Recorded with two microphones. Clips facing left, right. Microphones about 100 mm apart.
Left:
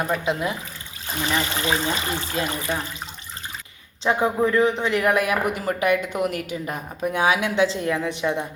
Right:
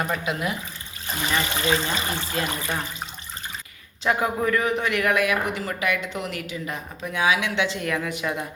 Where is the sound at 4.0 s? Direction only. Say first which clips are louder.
Left 3 dB; 25° left (ahead or behind).